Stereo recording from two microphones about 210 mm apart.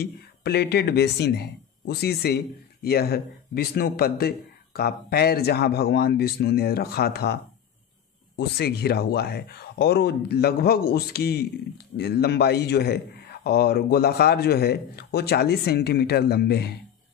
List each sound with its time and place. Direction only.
0.0 s a man's voice: 50° left (ahead or behind)
8.4 s a man's voice: 50° left (ahead or behind)